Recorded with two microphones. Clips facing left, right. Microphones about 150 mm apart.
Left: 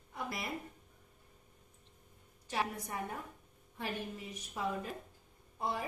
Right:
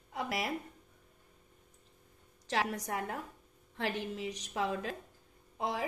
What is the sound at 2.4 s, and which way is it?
A woman's voice, 90° right.